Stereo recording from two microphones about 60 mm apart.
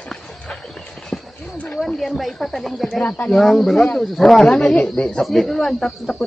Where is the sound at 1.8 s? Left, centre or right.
Centre.